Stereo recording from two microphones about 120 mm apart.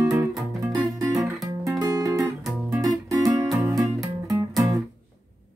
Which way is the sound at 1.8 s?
30° right (ahead or behind).